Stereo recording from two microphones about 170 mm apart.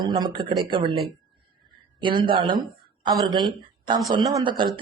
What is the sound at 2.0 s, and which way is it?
Speech, 30° right (ahead or behind).